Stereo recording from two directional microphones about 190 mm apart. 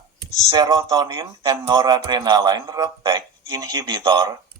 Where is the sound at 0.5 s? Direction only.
20° right (ahead or behind).